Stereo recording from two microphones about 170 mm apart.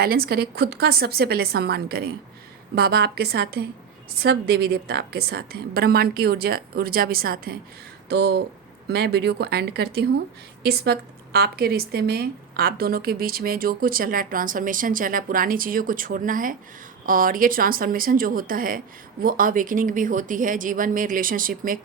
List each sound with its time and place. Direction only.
0.0 s a woman's voice: 65° right (ahead or behind)
8.1 s a woman's voice: 70° right (ahead or behind); by 21.8 s 55° right (ahead or behind)